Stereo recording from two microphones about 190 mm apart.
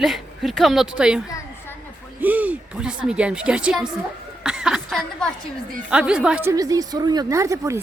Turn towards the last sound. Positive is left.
turn(degrees=-15)  # may be behind; listen again after turning